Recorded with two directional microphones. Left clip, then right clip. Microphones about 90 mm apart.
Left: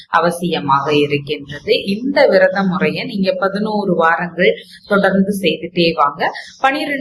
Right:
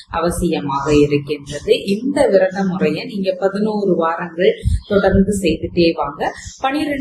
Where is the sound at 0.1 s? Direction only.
30° right (ahead or behind).